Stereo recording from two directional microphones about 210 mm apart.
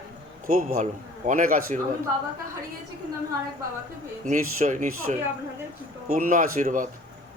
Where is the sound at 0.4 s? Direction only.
40° right (ahead or behind).